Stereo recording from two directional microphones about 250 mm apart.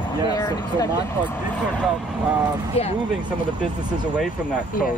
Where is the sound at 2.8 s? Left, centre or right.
Left.